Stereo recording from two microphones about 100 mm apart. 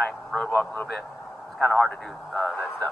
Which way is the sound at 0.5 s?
20° left (ahead or behind).